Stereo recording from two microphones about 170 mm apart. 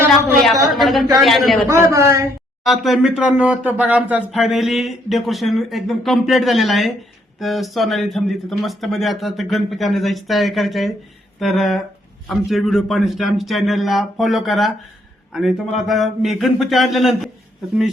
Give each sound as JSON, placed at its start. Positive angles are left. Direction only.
{"t": 0.1, "sound": "a woman's voice", "side_deg": 0}
{"t": 1.7, "sound": "a man's voice", "side_deg": -15}
{"t": 2.6, "sound": "speech", "side_deg": 0}